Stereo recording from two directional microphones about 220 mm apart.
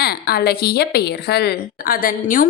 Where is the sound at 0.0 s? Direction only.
45° left (ahead or behind).